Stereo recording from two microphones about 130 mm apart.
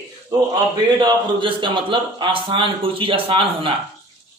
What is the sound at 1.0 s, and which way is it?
A man's voice, 35° right (ahead or behind).